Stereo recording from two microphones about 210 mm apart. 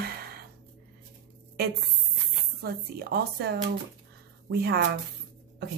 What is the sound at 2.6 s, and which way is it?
A woman's voice, 50° right (ahead or behind).